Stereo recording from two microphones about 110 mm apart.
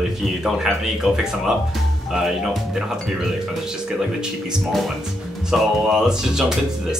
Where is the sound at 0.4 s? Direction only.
Centre (ahead or behind).